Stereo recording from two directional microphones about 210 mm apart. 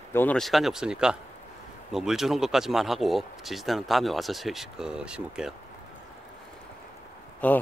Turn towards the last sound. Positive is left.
turn(degrees=5)  # may be behind; listen again after turning